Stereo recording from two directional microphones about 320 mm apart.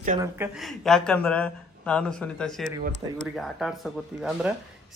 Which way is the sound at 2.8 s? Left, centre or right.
Right.